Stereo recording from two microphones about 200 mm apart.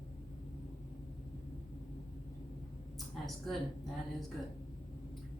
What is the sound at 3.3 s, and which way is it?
Speech, centre (ahead or behind).